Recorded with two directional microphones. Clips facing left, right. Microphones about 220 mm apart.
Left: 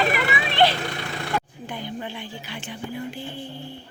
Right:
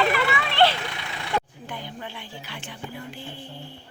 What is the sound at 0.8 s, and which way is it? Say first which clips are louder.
Speech: left 5 dB; 45° left (ahead or behind).